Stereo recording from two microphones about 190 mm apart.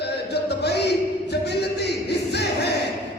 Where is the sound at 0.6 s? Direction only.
60° left (ahead or behind).